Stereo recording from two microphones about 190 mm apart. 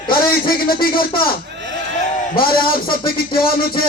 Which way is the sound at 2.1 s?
50° left (ahead or behind).